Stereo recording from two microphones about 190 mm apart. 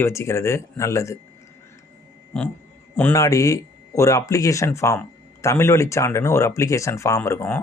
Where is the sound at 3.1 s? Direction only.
15° left (ahead or behind).